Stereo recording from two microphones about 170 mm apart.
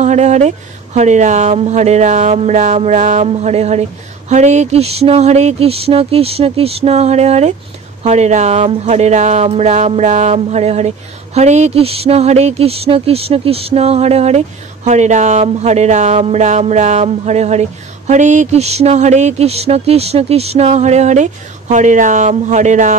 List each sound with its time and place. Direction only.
0.0 s speech: 40° right (ahead or behind)